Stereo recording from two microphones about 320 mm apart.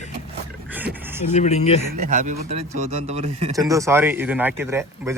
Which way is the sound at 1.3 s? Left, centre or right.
Left.